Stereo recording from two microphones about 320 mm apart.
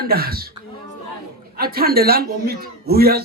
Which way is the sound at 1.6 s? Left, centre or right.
Right.